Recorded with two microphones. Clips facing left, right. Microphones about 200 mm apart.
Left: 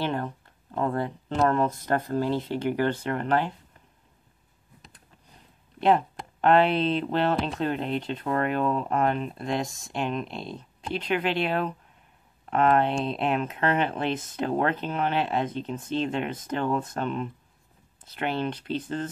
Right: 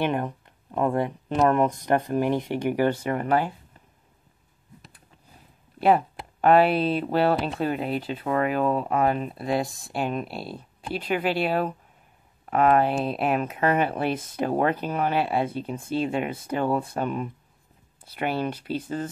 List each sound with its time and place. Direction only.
0.0 s speech: 15° right (ahead or behind)
5.8 s speech: 10° right (ahead or behind)